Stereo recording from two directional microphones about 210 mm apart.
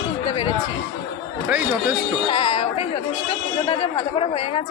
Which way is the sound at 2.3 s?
30° left (ahead or behind).